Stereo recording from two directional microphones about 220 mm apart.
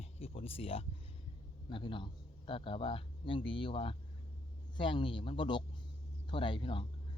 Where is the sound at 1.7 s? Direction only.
20° left (ahead or behind).